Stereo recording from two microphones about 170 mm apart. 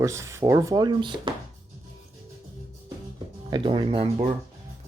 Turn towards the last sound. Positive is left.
turn(degrees=-35)  # may be behind; listen again after turning